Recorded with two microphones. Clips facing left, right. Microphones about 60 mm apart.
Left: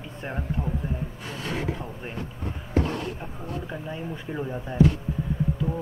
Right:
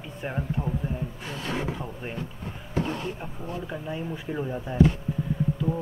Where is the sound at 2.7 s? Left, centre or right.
Left.